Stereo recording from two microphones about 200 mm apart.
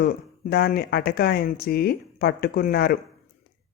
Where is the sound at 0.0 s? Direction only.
50° left (ahead or behind).